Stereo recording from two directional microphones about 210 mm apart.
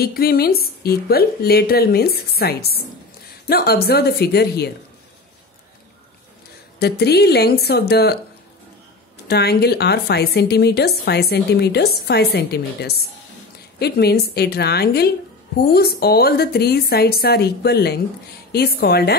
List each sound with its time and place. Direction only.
0.0 s a woman's voice: 45° left (ahead or behind)
6.8 s a woman's voice: 50° left (ahead or behind)
9.3 s a woman's voice: 50° left (ahead or behind)